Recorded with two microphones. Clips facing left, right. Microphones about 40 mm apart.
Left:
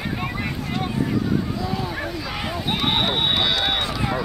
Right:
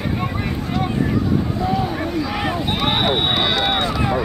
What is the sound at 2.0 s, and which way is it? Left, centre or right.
Speech, centre.